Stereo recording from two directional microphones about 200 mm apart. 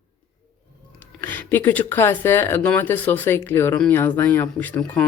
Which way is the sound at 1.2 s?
10° left (ahead or behind).